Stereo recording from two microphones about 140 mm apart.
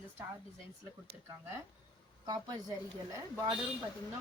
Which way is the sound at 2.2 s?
30° right (ahead or behind).